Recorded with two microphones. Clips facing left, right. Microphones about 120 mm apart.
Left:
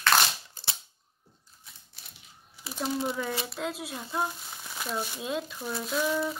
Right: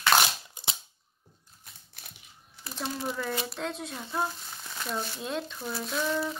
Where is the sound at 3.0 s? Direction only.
5° left (ahead or behind).